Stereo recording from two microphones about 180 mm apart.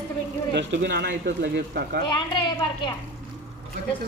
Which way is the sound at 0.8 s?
65° right (ahead or behind).